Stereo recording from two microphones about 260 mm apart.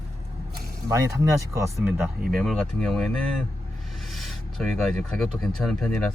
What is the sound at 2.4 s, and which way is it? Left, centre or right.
Speech, centre.